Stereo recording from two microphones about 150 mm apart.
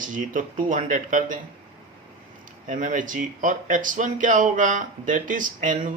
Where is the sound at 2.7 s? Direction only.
60° right (ahead or behind).